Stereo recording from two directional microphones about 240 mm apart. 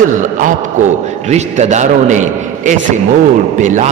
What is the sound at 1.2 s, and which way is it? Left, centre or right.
A man's voice, right.